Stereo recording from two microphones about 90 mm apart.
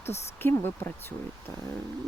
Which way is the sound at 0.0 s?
25° left (ahead or behind).